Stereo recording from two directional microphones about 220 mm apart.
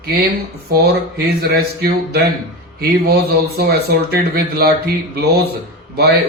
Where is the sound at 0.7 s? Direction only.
45° right (ahead or behind).